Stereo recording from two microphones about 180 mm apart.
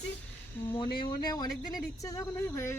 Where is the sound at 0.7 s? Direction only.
25° left (ahead or behind).